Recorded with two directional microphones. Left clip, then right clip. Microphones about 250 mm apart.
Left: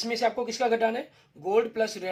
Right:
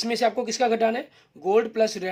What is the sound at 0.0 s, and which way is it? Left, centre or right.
Speech, right.